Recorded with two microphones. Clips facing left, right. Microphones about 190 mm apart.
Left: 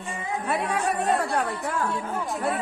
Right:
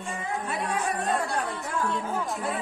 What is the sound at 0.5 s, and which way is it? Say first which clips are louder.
Speech: left 5 dB; 65° left (ahead or behind).